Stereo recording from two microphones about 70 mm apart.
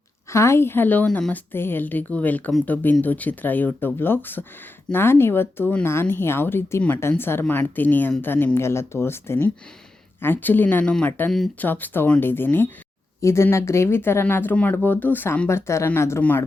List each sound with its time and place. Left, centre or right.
0.3 s speech: left
13.2 s speech: left
15.4 s speech: left